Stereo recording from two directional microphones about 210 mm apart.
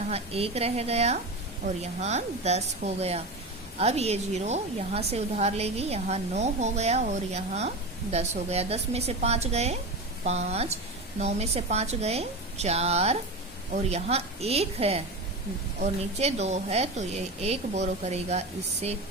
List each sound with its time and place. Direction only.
0.1 s a woman's voice: 30° right (ahead or behind)